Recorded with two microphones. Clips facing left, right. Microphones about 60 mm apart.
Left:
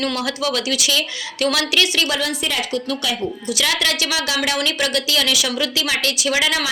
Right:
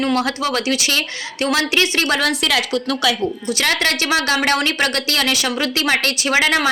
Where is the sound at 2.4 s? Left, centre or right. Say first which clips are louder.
Right 4 dB; right.